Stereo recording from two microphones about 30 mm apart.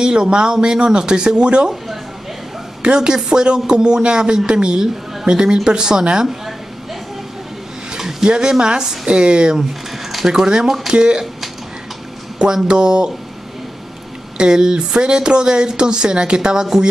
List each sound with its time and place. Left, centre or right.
0.0 s speech: right
2.8 s a woman's voice: right
8.3 s speech: right
10.2 s speech: centre
12.6 s speech: right
14.3 s speech: right